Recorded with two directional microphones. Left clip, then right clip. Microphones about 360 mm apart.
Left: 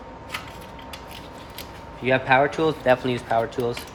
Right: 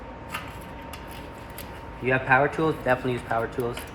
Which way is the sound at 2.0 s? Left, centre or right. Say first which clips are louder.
Left 2 dB; left.